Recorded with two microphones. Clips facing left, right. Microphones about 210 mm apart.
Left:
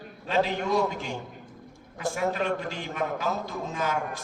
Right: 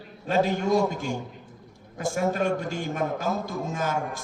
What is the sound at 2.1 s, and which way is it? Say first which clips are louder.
A man's voice: right 3 dB; 45° right (ahead or behind).